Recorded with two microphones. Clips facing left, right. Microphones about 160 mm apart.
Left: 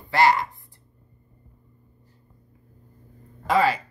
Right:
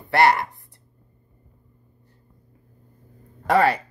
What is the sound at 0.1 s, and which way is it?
Speech, 60° right (ahead or behind).